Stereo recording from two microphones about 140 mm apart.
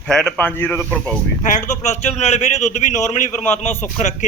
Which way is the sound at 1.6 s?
60° left (ahead or behind).